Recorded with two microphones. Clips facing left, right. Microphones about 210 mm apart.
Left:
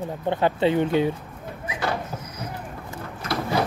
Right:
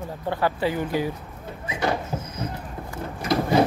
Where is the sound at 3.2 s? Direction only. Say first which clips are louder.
Right 5 dB; 20° right (ahead or behind).